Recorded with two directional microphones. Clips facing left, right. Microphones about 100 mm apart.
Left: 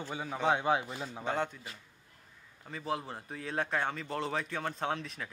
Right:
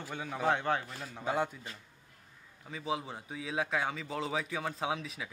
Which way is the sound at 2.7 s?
Centre (ahead or behind).